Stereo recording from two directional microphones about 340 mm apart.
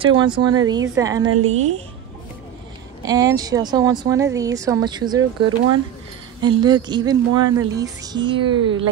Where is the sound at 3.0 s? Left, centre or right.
Centre.